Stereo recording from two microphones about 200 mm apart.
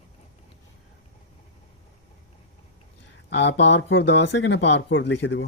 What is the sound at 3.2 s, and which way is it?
Speech, 60° left (ahead or behind).